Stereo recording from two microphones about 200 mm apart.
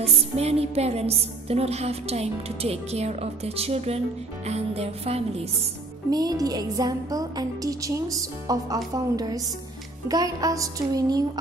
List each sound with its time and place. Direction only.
0.0 s music: 30° right (ahead or behind)
6.0 s speech: 20° right (ahead or behind)